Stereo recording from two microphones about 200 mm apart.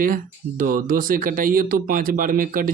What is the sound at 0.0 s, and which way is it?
Speech, 45° right (ahead or behind).